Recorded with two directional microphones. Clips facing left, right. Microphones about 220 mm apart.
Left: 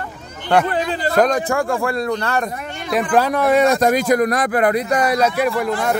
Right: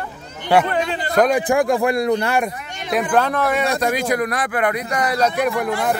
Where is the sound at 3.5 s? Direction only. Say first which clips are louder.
Left 5 dB; 45° left (ahead or behind).